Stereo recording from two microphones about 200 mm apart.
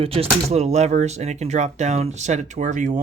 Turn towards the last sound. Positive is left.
turn(degrees=-40)  # may be behind; listen again after turning